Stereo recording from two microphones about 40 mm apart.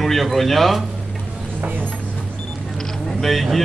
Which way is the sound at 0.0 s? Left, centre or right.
Centre.